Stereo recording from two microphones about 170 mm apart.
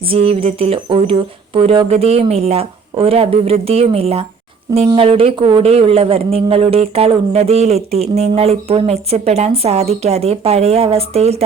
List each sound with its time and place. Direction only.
0.1 s a man's voice: 35° right (ahead or behind)